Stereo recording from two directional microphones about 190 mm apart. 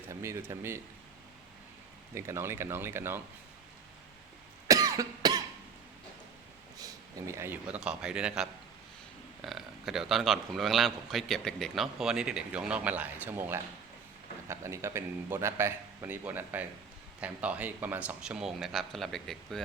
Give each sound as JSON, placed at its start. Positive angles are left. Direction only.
{"t": 0.1, "sound": "a man's voice", "side_deg": -15}
{"t": 2.1, "sound": "a man's voice", "side_deg": -15}
{"t": 4.7, "sound": "cough", "side_deg": -15}
{"t": 6.7, "sound": "a man's voice", "side_deg": -15}